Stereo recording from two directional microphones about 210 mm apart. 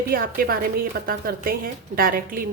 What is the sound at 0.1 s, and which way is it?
A woman's voice, 45° right (ahead or behind).